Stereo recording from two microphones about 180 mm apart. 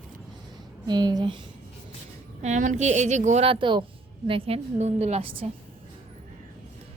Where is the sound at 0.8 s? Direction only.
20° right (ahead or behind).